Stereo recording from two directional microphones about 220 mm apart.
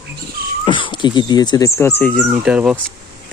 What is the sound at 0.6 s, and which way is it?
Speech, 20° left (ahead or behind).